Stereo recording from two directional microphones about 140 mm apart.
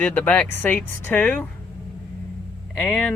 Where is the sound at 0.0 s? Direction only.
10° left (ahead or behind).